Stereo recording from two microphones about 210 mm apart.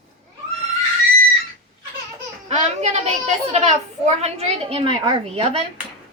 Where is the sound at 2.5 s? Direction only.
30° right (ahead or behind).